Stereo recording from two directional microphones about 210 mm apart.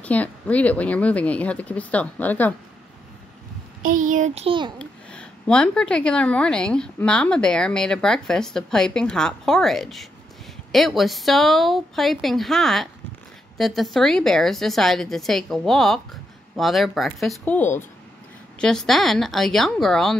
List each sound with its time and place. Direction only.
0.0 s a woman's voice: 5° left (ahead or behind)
3.8 s a child's voice: 35° right (ahead or behind)
4.7 s a woman's voice: 5° left (ahead or behind)